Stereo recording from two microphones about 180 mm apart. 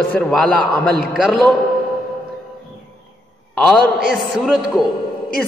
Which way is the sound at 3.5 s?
5° left (ahead or behind).